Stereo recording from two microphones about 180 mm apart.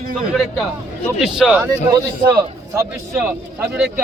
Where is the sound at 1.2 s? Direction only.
5° right (ahead or behind).